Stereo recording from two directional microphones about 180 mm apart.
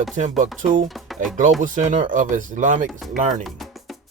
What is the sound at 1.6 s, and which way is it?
Speech, 45° right (ahead or behind).